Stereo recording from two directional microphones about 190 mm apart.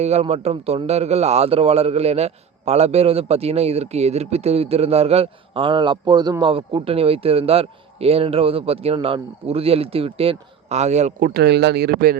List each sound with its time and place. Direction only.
0.0 s a man's voice: 35° right (ahead or behind)
11.3 s speech: 60° right (ahead or behind)